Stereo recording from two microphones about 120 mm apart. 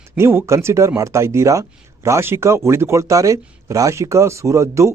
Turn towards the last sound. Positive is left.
turn(degrees=-25)  # may be behind; listen again after turning